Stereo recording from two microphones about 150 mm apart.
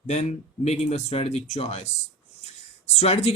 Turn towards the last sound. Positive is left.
turn(degrees=40)  # may be behind; listen again after turning